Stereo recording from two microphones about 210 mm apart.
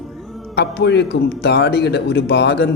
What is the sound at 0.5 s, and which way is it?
A man's voice, 55° left (ahead or behind).